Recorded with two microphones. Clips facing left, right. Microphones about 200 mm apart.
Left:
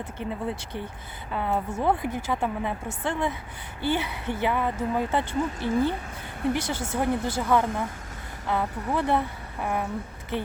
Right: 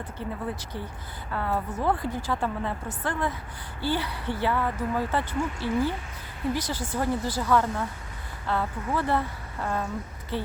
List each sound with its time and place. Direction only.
0.2 s speech: 20° left (ahead or behind)